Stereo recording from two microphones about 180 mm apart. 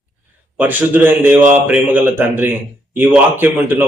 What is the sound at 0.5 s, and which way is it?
A man's voice, 10° right (ahead or behind).